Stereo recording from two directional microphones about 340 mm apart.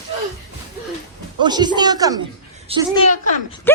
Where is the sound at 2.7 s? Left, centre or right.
Centre.